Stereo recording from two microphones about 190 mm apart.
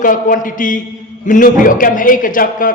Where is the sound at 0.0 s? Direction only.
45° left (ahead or behind).